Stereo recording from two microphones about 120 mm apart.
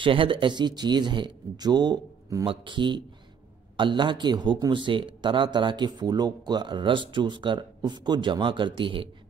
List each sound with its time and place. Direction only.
0.0 s speech: 45° right (ahead or behind)
2.4 s speech: 45° right (ahead or behind)